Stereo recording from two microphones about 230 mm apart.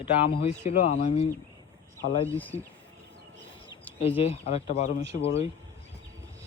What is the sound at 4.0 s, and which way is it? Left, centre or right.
Speech, left.